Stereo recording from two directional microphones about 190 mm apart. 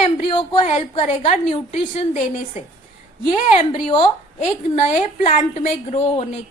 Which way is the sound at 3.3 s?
25° left (ahead or behind).